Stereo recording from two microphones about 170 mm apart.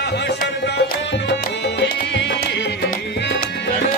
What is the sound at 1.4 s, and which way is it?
Music, 75° left (ahead or behind).